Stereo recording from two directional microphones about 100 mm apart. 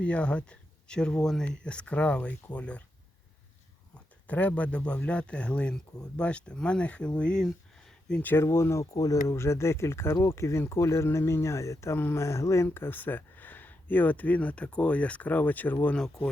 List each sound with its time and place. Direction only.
0.0 s speech: 10° left (ahead or behind)
3.9 s speech: 15° left (ahead or behind)
8.2 s speech: 20° left (ahead or behind)
16.0 s speech: 5° left (ahead or behind)